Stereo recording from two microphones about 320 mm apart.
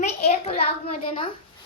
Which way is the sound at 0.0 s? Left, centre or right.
Centre.